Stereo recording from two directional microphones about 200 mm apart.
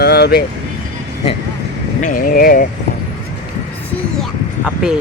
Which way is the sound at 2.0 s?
45° left (ahead or behind).